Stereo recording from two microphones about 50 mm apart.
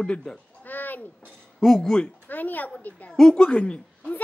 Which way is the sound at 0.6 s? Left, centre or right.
Left.